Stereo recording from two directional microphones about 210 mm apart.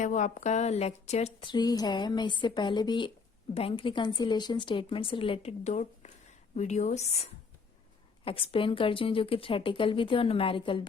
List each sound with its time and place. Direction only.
0.0 s a woman's voice: 35° left (ahead or behind)
8.2 s a woman's voice: 25° left (ahead or behind)